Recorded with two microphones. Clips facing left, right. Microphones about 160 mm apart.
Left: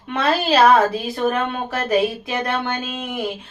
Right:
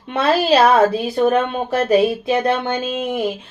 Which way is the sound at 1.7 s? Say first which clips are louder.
Right 5 dB; 25° right (ahead or behind).